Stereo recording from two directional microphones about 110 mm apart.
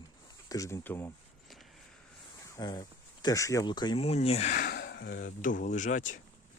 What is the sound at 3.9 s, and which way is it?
Speech, 65° left (ahead or behind).